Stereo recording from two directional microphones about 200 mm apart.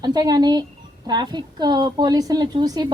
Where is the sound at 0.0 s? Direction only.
20° right (ahead or behind).